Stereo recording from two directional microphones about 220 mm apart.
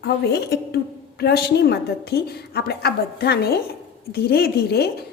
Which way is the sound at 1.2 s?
45° left (ahead or behind).